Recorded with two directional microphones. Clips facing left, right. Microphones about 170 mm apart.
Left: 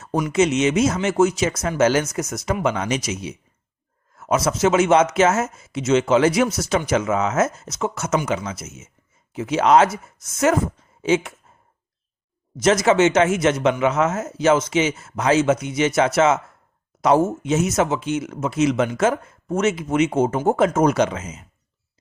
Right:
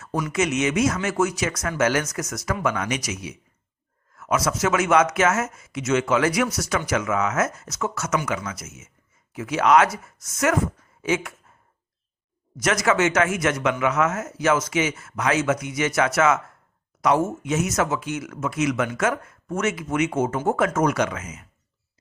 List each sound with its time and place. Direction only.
0.0 s speech: 20° left (ahead or behind)
12.5 s speech: 25° left (ahead or behind)